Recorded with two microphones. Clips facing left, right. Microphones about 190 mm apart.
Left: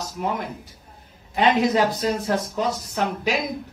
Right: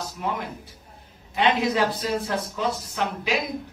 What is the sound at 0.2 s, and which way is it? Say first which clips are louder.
A man's voice: left 3 dB; 45° left (ahead or behind).